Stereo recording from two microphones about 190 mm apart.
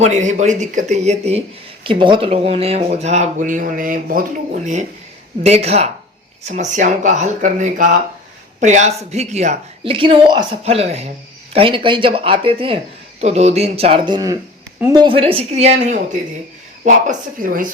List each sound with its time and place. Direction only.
0.0 s a woman's voice: 40° right (ahead or behind)